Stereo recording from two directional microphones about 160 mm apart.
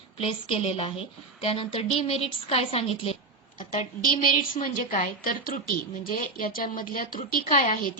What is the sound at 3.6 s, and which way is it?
A woman's voice, 55° left (ahead or behind).